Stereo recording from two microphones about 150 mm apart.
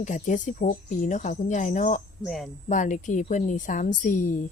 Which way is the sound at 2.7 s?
55° left (ahead or behind).